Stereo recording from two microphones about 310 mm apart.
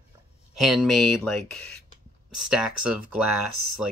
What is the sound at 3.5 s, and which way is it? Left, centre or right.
Speech, right.